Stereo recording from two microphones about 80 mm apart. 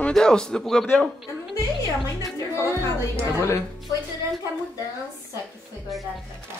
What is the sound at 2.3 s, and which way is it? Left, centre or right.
A woman's voice, left.